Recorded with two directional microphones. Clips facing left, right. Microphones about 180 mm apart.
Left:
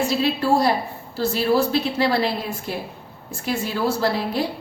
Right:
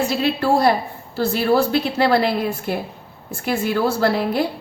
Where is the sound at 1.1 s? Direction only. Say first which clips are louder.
Right 2 dB; 60° right (ahead or behind).